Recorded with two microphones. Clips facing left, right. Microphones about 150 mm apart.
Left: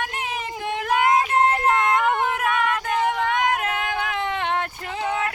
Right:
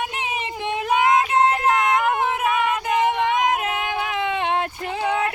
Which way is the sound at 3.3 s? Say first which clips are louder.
Right 1 dB; 20° right (ahead or behind).